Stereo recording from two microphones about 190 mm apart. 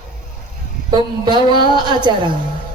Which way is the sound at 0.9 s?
25° right (ahead or behind).